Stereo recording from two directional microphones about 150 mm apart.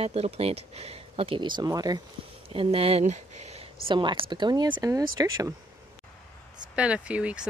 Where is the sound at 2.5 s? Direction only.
40° right (ahead or behind).